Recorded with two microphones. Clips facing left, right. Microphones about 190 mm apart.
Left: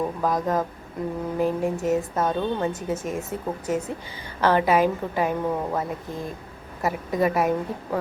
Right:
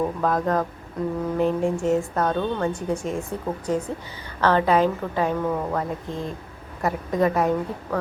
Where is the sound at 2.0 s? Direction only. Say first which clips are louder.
Right 1 dB; 20° left (ahead or behind).